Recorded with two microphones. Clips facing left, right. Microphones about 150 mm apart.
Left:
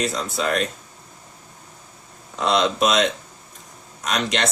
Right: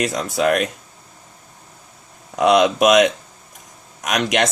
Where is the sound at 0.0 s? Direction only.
60° right (ahead or behind).